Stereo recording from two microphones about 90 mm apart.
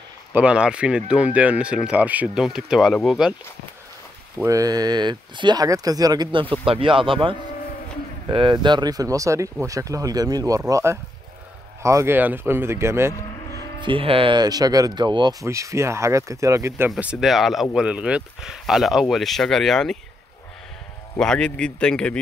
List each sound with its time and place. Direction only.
0.3 s speech: 15° right (ahead or behind)
2.2 s speech: 5° right (ahead or behind)
4.5 s speech: 45° right (ahead or behind); by 5.6 s 60° right (ahead or behind)
5.6 s speech: 45° right (ahead or behind)
6.6 s speech: 80° right; by 10.6 s 40° right (ahead or behind)
10.7 s speech: 30° right (ahead or behind)
13.7 s speech: 75° right (ahead or behind)
14.4 s speech: 45° right (ahead or behind)
15.4 s speech: 35° right (ahead or behind)
17.0 s speech: 5° right (ahead or behind)
17.8 s speech: 10° right (ahead or behind); by 20.0 s 5° left (ahead or behind)
21.2 s speech: 10° left (ahead or behind)